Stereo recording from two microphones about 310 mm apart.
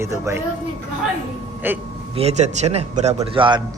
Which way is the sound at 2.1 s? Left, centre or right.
Centre.